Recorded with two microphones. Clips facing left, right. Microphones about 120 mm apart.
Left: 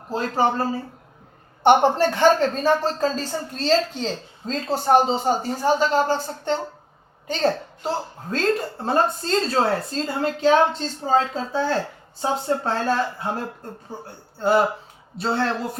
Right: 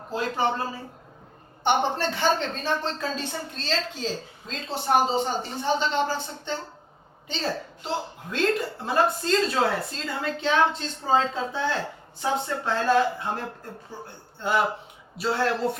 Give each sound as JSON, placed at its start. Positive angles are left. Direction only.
{"t": 0.1, "sound": "a woman's voice", "side_deg": 40}